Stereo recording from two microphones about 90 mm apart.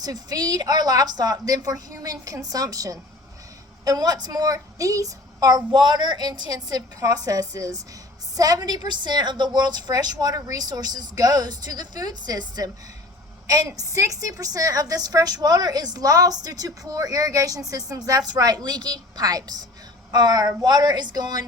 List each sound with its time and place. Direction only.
0.0 s a woman's voice: 45° right (ahead or behind)